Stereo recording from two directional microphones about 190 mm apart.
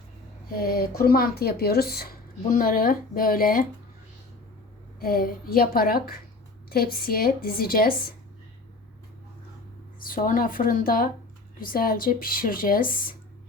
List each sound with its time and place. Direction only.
0.5 s speech: 50° left (ahead or behind)
4.9 s speech: 50° left (ahead or behind)
10.0 s speech: 45° left (ahead or behind)